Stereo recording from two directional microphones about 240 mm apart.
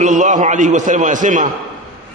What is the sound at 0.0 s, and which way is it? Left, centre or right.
A man's voice, right.